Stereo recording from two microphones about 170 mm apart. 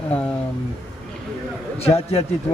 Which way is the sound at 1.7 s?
35° left (ahead or behind).